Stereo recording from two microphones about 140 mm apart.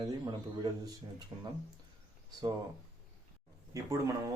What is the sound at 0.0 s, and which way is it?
A man's voice, 30° right (ahead or behind).